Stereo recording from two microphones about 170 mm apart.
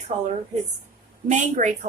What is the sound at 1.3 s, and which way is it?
Speech, 45° right (ahead or behind).